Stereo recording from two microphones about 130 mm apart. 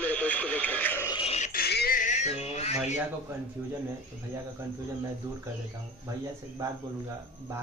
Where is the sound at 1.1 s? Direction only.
50° left (ahead or behind).